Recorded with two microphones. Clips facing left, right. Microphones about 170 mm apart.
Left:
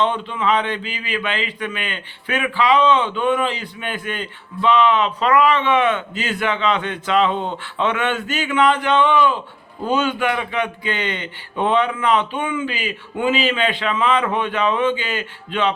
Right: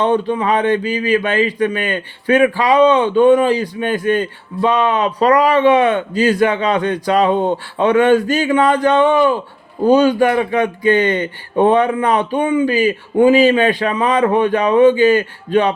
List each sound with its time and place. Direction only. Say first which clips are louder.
0.0 s speech: right 5 dB; 40° right (ahead or behind)